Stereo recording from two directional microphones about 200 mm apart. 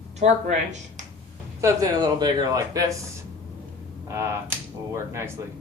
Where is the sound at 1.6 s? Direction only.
15° right (ahead or behind).